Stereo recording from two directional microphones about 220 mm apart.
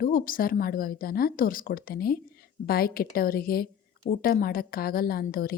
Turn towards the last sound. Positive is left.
turn(degrees=45)  # may be behind; listen again after turning